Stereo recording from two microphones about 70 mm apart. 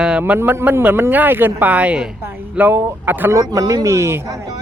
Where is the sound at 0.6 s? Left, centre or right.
Right.